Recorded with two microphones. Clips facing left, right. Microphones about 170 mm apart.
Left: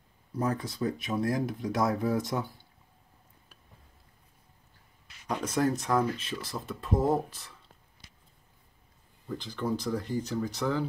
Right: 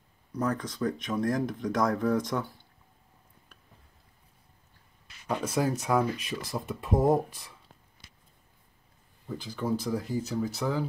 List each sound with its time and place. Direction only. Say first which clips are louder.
0.6 s speech: right 1 dB; 10° left (ahead or behind)
5.3 s speech: even; 10° right (ahead or behind)
9.3 s speech: right 1 dB; 10° right (ahead or behind)